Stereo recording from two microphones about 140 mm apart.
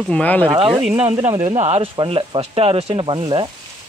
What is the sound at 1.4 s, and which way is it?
Speech, 50° right (ahead or behind).